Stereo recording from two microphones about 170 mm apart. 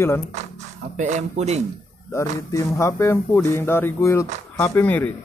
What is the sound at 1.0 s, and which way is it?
Speech, 45° right (ahead or behind).